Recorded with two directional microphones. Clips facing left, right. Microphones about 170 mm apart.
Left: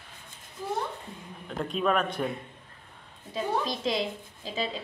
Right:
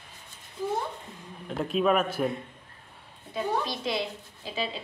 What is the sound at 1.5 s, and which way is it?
Speech, 5° right (ahead or behind).